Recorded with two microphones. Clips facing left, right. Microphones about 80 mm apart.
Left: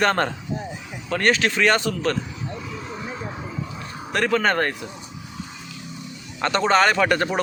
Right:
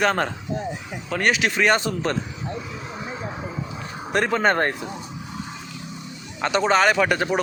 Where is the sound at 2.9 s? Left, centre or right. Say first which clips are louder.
Right 2 dB; centre.